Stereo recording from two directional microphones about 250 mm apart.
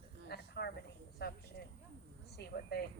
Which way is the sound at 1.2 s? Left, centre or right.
Left.